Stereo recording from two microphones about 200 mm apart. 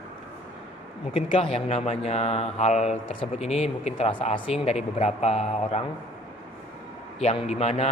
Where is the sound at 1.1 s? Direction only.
25° left (ahead or behind).